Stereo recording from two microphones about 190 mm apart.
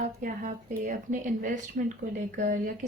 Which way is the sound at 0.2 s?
45° right (ahead or behind).